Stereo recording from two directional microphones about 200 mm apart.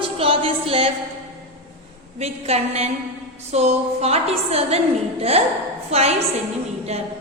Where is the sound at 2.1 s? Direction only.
30° right (ahead or behind).